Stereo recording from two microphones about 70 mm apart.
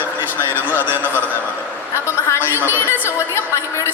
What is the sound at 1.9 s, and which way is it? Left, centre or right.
A woman's voice, left.